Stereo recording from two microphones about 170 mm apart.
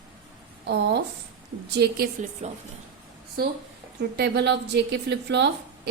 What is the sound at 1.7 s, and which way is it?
Speech, 75° right (ahead or behind).